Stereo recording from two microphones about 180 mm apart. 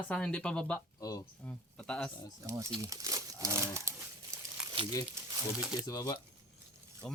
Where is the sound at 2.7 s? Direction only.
20° right (ahead or behind).